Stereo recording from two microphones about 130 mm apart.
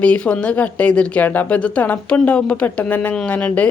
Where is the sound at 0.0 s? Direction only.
10° left (ahead or behind).